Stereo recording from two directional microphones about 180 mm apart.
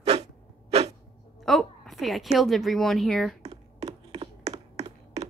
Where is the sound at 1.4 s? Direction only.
Centre (ahead or behind).